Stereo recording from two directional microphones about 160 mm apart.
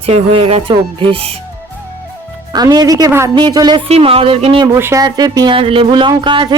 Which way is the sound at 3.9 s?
40° right (ahead or behind).